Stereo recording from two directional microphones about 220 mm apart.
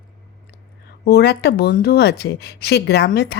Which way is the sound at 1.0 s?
45° left (ahead or behind).